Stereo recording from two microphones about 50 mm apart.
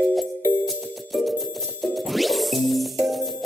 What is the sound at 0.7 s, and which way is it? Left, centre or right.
Music, centre.